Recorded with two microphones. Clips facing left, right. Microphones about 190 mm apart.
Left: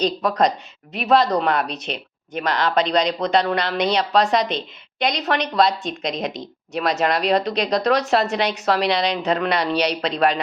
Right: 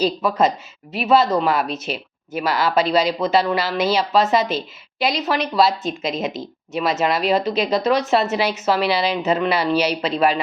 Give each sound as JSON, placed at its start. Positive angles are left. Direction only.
{"t": 0.0, "sound": "speech", "side_deg": -5}